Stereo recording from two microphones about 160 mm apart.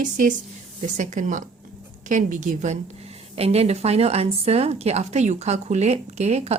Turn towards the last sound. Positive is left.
turn(degrees=-45)  # may be behind; listen again after turning